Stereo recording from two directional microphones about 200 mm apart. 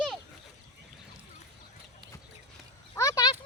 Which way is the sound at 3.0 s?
15° left (ahead or behind).